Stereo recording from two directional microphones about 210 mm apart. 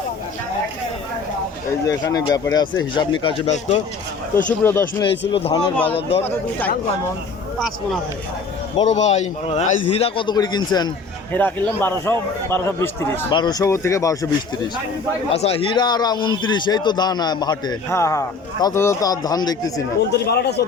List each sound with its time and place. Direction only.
1.9 s a man's voice: 15° left (ahead or behind)
4.4 s speech: 10° left (ahead or behind)
5.3 s a man's voice: 25° left (ahead or behind)
5.7 s speech: 10° left (ahead or behind)
8.7 s a man's voice: 30° left (ahead or behind)
11.3 s speech: 10° left (ahead or behind)
15.3 s a man's voice: 30° left (ahead or behind)
20.1 s speech: 50° left (ahead or behind)